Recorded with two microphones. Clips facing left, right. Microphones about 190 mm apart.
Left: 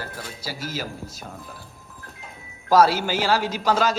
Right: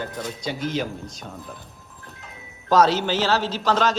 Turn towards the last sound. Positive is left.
turn(degrees=10)  # may be behind; listen again after turning